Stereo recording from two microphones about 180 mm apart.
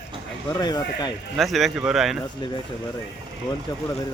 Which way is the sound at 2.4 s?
25° left (ahead or behind).